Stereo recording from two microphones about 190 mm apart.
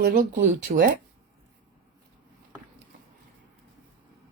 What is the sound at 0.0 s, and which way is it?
Speech, 55° right (ahead or behind).